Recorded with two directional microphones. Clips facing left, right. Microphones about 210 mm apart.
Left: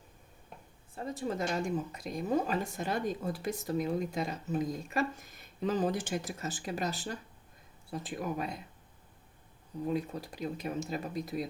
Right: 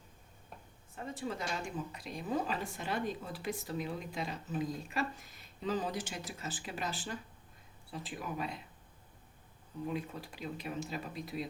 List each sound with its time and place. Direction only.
0.9 s a woman's voice: 40° left (ahead or behind)
9.8 s a woman's voice: 40° left (ahead or behind)